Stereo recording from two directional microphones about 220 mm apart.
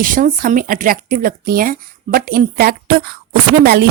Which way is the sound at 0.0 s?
40° right (ahead or behind).